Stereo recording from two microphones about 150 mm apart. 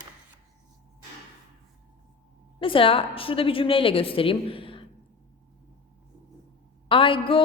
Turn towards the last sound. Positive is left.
turn(degrees=35)  # may be behind; listen again after turning